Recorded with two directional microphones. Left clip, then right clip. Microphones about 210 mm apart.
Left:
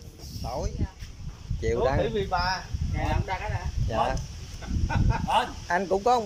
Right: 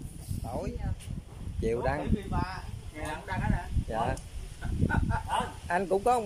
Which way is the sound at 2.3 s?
50° left (ahead or behind).